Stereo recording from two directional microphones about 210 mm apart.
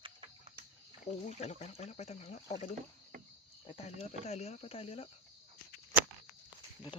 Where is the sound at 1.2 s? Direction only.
30° left (ahead or behind).